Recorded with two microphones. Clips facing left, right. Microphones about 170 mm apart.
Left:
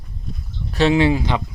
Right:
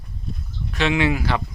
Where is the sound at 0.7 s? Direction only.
35° left (ahead or behind); by 1.4 s 20° left (ahead or behind).